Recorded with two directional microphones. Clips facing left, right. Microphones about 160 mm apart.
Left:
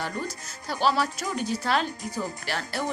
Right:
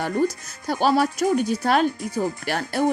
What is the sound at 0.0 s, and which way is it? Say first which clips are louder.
Speech: right 10 dB; 50° right (ahead or behind).